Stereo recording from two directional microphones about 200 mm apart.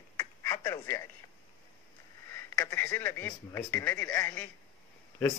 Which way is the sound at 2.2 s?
10° left (ahead or behind).